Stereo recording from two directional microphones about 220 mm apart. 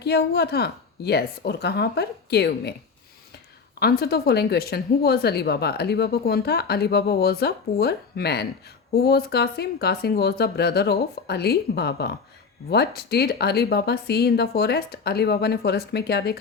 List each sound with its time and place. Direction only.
0.0 s speech: 50° left (ahead or behind)
3.8 s speech: 45° left (ahead or behind)